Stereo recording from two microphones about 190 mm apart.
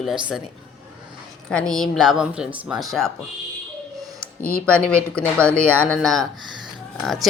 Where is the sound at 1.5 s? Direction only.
5° left (ahead or behind).